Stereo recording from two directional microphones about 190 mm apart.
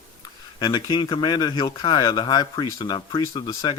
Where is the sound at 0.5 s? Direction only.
20° left (ahead or behind).